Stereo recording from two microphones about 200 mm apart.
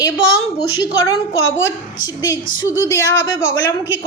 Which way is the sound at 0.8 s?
15° left (ahead or behind).